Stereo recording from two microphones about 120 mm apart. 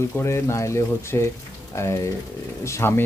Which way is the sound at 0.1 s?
20° left (ahead or behind).